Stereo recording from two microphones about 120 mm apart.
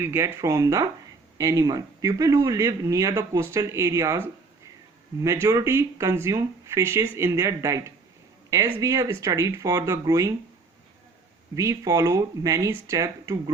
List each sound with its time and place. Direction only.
0.0 s a man's voice: 20° right (ahead or behind)
5.2 s a man's voice: 25° right (ahead or behind)
11.5 s a man's voice: 25° right (ahead or behind)